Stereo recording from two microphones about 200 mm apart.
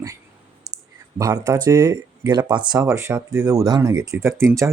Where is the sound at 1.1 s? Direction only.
15° right (ahead or behind).